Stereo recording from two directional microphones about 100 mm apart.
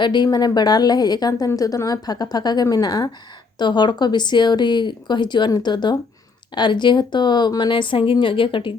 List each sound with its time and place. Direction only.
0.0 s a woman's voice: 45° left (ahead or behind)